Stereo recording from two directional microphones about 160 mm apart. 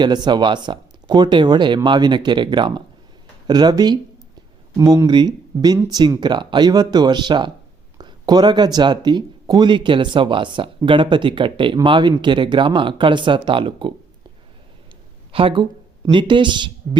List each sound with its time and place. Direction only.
0.0 s speech: 25° right (ahead or behind)
15.3 s speech: 35° right (ahead or behind)